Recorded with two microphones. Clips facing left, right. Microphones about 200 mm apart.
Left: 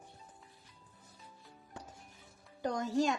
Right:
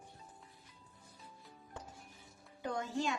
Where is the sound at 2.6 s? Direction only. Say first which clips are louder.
Left 5 dB; 40° left (ahead or behind).